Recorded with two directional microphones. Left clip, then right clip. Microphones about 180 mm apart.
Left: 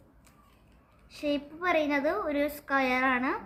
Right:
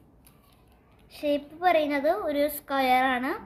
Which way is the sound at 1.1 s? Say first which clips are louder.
Right 4 dB; 20° left (ahead or behind).